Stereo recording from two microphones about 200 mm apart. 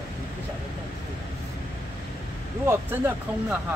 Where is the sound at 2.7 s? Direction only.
10° right (ahead or behind).